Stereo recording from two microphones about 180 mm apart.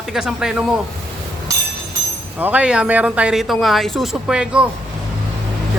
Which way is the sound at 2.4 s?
5° right (ahead or behind).